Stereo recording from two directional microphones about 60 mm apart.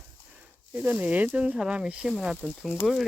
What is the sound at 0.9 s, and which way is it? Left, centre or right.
Speech, right.